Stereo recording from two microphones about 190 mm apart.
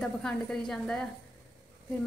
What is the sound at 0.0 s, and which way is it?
A woman's voice, 5° left (ahead or behind).